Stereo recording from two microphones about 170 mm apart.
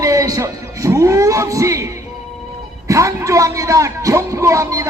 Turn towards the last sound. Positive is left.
turn(degrees=-20)  # may be behind; listen again after turning